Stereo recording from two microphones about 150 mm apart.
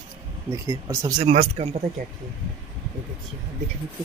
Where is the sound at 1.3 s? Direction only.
45° right (ahead or behind).